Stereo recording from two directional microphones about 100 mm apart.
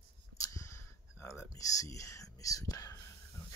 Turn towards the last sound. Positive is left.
turn(degrees=35)  # may be behind; listen again after turning